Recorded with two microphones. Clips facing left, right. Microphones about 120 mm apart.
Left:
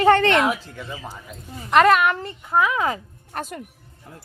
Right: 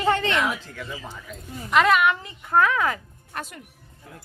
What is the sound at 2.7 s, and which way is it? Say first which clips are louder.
Speech: left 1 dB; 20° left (ahead or behind).